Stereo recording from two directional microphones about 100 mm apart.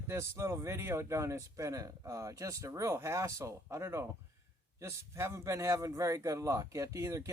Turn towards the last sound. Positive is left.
turn(degrees=-30)  # may be behind; listen again after turning